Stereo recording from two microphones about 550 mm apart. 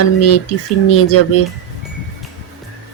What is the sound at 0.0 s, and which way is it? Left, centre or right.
Speech, left.